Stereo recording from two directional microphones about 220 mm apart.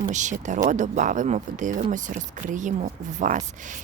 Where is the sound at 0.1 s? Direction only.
35° right (ahead or behind).